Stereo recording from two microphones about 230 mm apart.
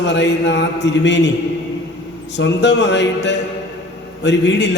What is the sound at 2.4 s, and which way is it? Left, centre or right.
A man's voice, left.